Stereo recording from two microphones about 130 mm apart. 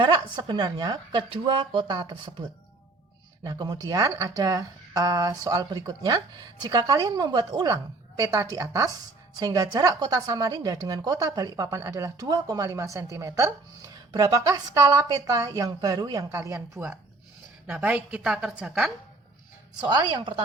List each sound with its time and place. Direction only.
0.0 s speech: 35° right (ahead or behind)
3.4 s speech: 30° right (ahead or behind)
16.8 s a woman's voice: 10° right (ahead or behind)
19.8 s speech: 35° right (ahead or behind)